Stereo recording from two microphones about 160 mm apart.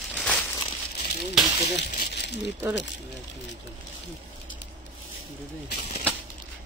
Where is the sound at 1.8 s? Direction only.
90° left.